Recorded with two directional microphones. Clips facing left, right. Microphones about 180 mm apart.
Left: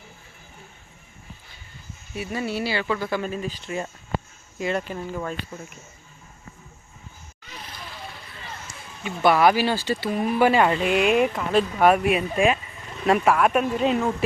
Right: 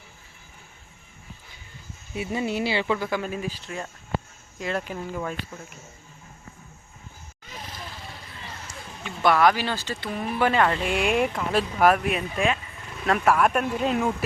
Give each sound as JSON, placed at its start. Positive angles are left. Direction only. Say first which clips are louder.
{"t": 2.1, "sound": "speech", "louder": "right 1 dB", "side_deg": -20}
{"t": 4.5, "sound": "speech", "louder": "left 3 dB", "side_deg": 0}
{"t": 9.0, "sound": "speech", "louder": "left 2 dB", "side_deg": 5}